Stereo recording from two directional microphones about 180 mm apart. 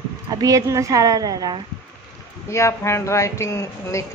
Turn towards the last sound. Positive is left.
turn(degrees=15)  # may be behind; listen again after turning